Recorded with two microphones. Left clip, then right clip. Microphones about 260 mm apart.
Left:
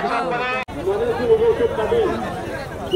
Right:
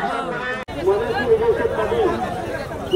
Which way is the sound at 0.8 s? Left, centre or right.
Centre.